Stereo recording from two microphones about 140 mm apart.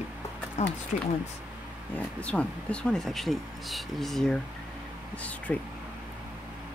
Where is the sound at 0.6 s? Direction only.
50° left (ahead or behind).